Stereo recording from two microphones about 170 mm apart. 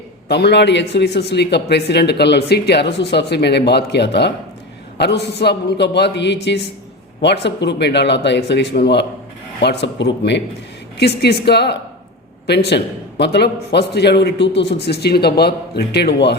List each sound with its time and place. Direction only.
0.3 s a man's voice: 80° left
9.6 s speech: 90° left
10.9 s a man's voice: 75° left (ahead or behind)